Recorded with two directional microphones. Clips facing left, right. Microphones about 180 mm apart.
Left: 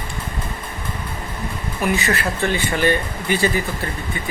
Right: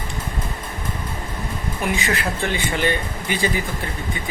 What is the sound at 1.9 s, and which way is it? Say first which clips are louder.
Speech: left 2 dB; 15° right (ahead or behind).